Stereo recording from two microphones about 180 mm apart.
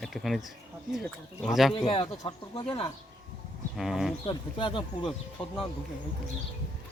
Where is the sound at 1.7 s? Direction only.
30° left (ahead or behind).